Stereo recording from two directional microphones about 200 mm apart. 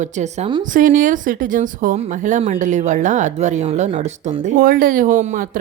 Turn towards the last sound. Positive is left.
turn(degrees=-40)  # may be behind; listen again after turning